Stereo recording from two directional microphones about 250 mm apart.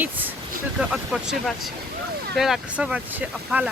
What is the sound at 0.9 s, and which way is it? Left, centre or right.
Speech, centre.